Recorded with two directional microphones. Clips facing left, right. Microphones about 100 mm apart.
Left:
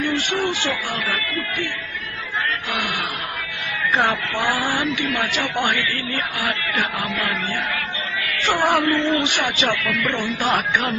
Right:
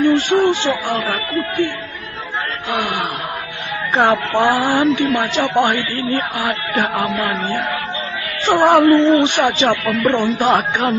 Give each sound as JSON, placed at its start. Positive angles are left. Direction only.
{"t": 0.0, "sound": "speech", "side_deg": -40}
{"t": 0.4, "sound": "speech", "side_deg": -20}
{"t": 0.9, "sound": "a man's voice", "side_deg": -30}
{"t": 3.9, "sound": "a man's voice", "side_deg": -35}
{"t": 10.2, "sound": "speech", "side_deg": -30}